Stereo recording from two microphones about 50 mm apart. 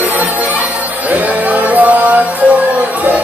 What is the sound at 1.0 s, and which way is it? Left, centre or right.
Music, right.